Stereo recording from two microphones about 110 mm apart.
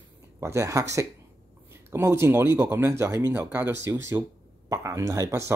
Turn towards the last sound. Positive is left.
turn(degrees=-25)  # may be behind; listen again after turning